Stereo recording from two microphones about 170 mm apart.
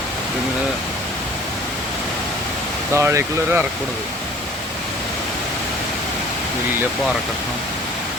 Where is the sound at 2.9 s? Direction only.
15° right (ahead or behind).